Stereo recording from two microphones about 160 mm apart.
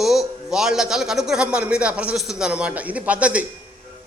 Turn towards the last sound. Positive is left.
turn(degrees=-10)  # may be behind; listen again after turning